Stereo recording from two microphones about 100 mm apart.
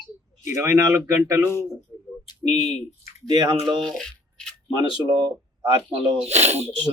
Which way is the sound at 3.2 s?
40° right (ahead or behind).